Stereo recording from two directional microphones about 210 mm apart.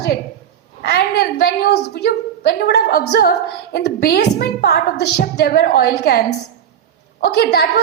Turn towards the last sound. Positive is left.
turn(degrees=50)  # may be behind; listen again after turning